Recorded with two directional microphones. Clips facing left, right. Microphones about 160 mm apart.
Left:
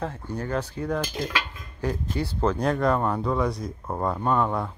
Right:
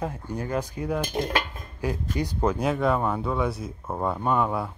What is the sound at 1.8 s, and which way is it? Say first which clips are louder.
Speech: even; 15° right (ahead or behind).